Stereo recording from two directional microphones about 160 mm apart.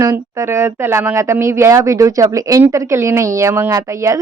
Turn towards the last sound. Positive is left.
turn(degrees=-15)  # may be behind; listen again after turning